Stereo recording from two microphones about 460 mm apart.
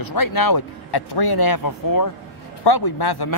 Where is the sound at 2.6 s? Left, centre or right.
Left.